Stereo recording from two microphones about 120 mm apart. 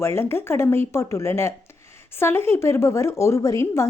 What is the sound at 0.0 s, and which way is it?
A woman's voice, 20° left (ahead or behind).